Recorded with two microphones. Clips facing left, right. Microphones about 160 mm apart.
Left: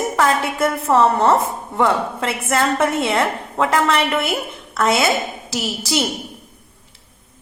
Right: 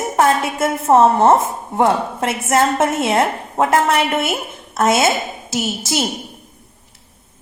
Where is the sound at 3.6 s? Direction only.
45° right (ahead or behind).